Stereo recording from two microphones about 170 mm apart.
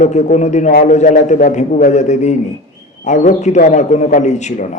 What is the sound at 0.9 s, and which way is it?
A man's voice, 45° left (ahead or behind).